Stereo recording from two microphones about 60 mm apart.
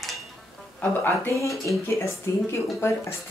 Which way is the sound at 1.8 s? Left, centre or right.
Left.